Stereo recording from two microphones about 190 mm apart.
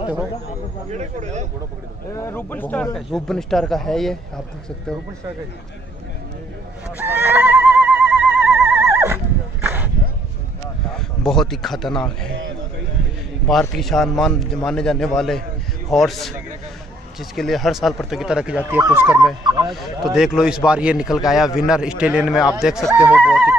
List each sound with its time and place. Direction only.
0.9 s speech: 35° right (ahead or behind)
2.1 s a man's voice: 15° left (ahead or behind)
7.0 s a sound: 10° right (ahead or behind)
11.0 s speech: centre (ahead or behind)
13.5 s a man's voice: centre (ahead or behind)
18.7 s speech: 15° right (ahead or behind)
19.7 s a man's voice: centre (ahead or behind)